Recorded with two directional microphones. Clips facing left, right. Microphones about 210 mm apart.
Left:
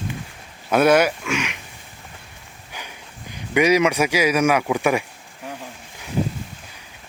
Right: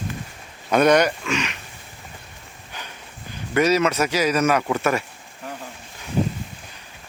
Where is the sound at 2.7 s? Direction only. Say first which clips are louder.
Left 1 dB; 10° left (ahead or behind).